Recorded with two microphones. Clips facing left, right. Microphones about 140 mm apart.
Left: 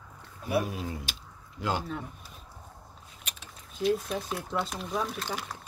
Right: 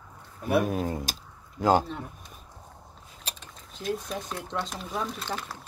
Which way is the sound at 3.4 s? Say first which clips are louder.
Left 8 dB; 5° left (ahead or behind).